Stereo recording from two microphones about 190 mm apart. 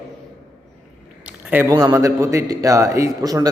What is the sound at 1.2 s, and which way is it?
A man's voice, 10° right (ahead or behind).